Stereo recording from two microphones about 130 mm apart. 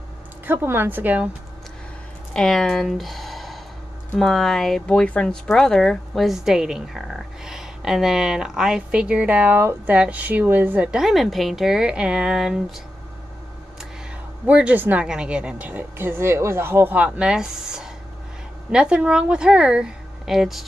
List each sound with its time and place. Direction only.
0.5 s a woman's voice: 15° right (ahead or behind)
2.3 s speech: 5° left (ahead or behind)
14.4 s a woman's voice: 10° right (ahead or behind)